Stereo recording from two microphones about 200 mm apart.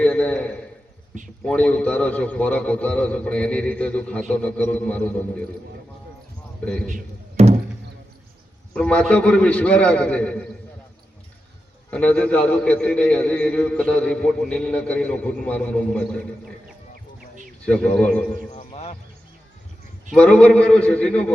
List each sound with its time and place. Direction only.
0.0 s a sound: 5° left (ahead or behind)
1.5 s a man's voice: 5° left (ahead or behind)
6.8 s music: 35° right (ahead or behind)
8.7 s a man's voice: 5° left (ahead or behind)
11.9 s a man's voice: 5° left (ahead or behind)
17.7 s a man's voice: 5° left (ahead or behind)
18.5 s music: 30° left (ahead or behind)
20.1 s a man's voice: 5° left (ahead or behind)